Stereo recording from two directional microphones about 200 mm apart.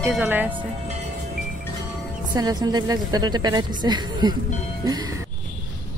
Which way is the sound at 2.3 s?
20° right (ahead or behind).